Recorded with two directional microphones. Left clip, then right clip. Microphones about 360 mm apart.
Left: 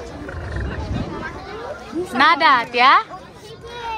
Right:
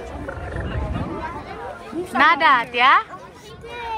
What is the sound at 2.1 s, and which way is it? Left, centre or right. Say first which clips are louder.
Speech: left 1 dB; centre.